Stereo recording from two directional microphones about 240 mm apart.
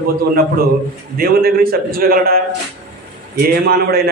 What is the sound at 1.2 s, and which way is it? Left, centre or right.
A man's voice, right.